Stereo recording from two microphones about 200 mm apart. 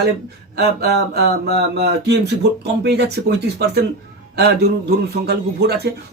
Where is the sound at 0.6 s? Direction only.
55° right (ahead or behind).